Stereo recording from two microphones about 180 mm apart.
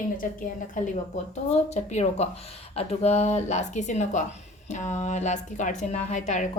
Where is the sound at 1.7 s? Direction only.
40° left (ahead or behind).